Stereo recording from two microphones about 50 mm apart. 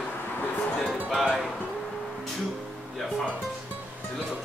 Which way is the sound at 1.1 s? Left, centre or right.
Centre.